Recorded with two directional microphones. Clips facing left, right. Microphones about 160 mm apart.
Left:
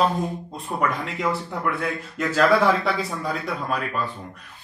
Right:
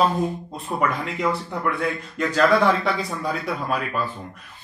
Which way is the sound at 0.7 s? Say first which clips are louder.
Right 1 dB; centre (ahead or behind).